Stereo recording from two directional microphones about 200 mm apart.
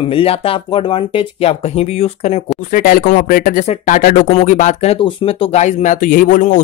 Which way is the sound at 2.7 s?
45° left (ahead or behind).